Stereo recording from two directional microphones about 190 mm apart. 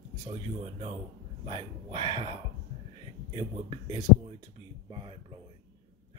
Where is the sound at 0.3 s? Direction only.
30° right (ahead or behind).